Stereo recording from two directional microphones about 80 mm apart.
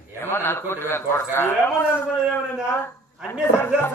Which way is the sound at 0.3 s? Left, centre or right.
Left.